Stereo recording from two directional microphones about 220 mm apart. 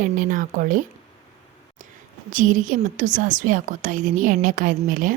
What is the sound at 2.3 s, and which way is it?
A woman's voice, 35° right (ahead or behind).